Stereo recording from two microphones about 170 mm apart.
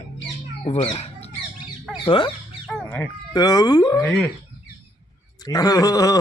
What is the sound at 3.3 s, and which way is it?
Speech, 20° left (ahead or behind).